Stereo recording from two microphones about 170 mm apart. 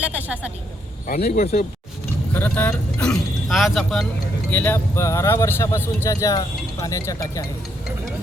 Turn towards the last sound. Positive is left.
turn(degrees=20)  # may be behind; listen again after turning